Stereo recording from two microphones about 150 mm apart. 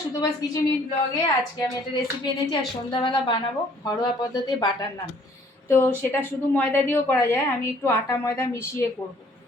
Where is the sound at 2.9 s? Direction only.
30° left (ahead or behind).